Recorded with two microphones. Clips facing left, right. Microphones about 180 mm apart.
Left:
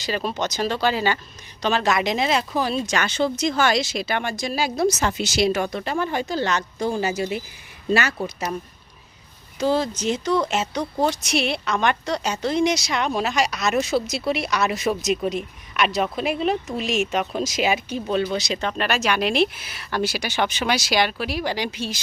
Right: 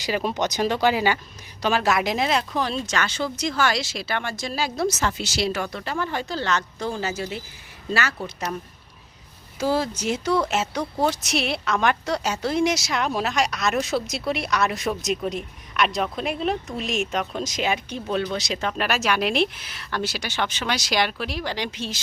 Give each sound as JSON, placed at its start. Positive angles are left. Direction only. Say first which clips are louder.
{"t": 0.0, "sound": "speech", "louder": "right 1 dB", "side_deg": -15}
{"t": 9.6, "sound": "speech", "louder": "left 2 dB", "side_deg": -5}